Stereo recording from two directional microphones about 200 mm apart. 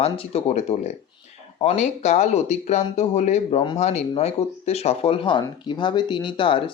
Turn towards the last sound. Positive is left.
turn(degrees=25)  # may be behind; listen again after turning